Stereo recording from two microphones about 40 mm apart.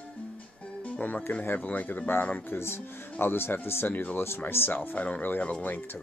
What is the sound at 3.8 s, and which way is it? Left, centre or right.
Speech, left.